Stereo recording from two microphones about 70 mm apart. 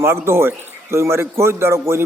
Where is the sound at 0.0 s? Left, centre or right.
Right.